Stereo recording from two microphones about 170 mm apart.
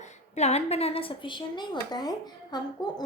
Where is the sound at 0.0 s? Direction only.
40° left (ahead or behind).